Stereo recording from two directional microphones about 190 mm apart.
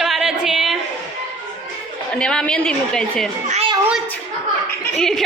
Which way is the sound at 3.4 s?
35° right (ahead or behind).